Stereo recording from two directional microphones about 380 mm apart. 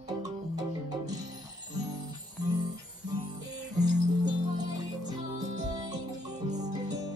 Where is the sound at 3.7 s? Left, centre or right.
Centre.